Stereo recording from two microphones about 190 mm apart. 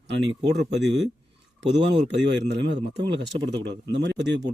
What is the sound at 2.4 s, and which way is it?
A man's voice, 65° right (ahead or behind).